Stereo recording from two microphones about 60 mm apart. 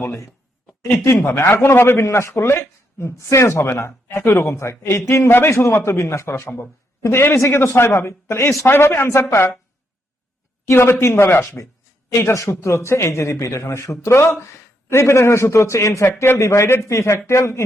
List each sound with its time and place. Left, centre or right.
0.0 s a man's voice: left
8.6 s a man's voice: left
10.7 s a man's voice: left
16.0 s a man's voice: left